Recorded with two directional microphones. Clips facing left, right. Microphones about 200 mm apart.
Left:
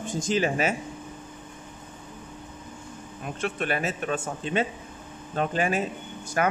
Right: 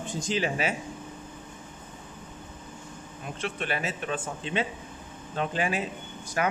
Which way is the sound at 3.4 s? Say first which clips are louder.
Left 4 dB; 50° left (ahead or behind).